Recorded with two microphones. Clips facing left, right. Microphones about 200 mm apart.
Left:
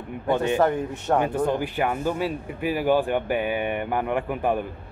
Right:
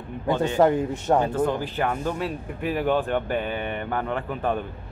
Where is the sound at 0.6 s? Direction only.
15° right (ahead or behind).